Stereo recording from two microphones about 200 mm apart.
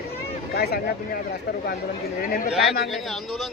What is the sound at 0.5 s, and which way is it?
Speech, 50° left (ahead or behind).